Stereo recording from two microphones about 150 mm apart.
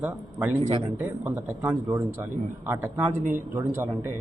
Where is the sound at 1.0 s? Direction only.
15° right (ahead or behind).